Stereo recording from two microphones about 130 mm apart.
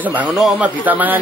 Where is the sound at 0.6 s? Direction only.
15° right (ahead or behind).